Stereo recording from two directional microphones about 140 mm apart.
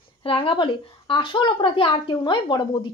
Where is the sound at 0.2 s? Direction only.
40° left (ahead or behind).